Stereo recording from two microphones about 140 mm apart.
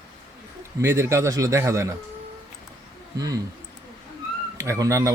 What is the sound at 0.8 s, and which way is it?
Speech, 20° right (ahead or behind).